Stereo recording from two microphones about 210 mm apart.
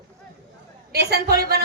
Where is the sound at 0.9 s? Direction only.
50° right (ahead or behind).